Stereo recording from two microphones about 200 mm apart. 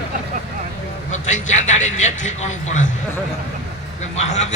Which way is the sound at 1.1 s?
40° left (ahead or behind).